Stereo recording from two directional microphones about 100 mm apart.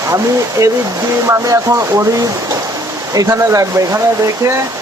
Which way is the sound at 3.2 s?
35° right (ahead or behind).